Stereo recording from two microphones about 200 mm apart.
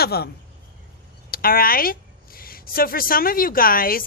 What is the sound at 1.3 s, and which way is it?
Speech, 45° left (ahead or behind).